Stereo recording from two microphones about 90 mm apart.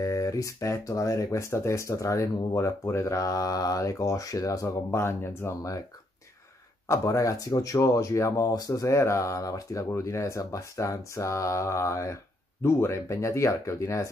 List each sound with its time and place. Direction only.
0.0 s speech: 35° left (ahead or behind)
6.9 s speech: 35° left (ahead or behind)